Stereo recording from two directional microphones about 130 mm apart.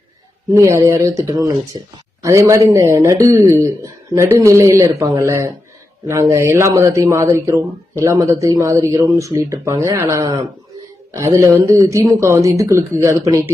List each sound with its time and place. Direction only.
0.5 s speech: 25° right (ahead or behind)